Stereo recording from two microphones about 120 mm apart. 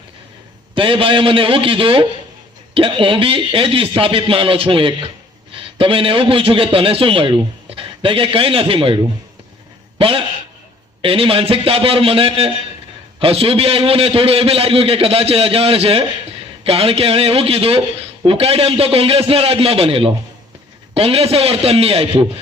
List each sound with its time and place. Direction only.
0.8 s a man's voice: 45° right (ahead or behind)
10.0 s a man's voice: 50° right (ahead or behind)